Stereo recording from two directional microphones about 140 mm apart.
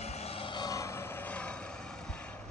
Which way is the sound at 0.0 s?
50° left (ahead or behind).